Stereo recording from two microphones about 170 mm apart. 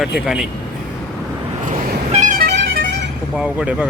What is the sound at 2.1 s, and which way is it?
Vehicle, 45° right (ahead or behind).